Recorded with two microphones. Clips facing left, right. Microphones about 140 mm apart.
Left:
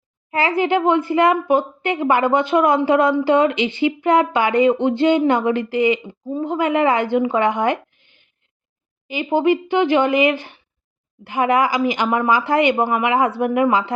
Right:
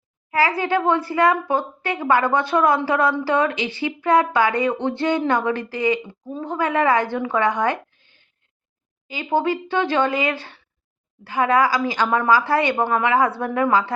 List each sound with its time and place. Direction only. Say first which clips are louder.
0.3 s speech: left 2 dB; 25° left (ahead or behind)